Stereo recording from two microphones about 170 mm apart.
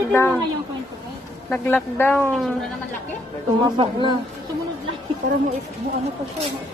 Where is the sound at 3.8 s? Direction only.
30° right (ahead or behind).